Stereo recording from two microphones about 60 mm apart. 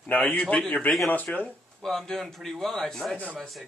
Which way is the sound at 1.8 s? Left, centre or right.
Centre.